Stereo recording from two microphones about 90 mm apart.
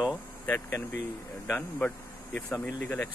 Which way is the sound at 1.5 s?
15° left (ahead or behind).